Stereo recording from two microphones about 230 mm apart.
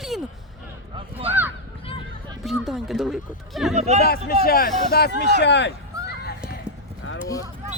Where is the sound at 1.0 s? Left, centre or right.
Right.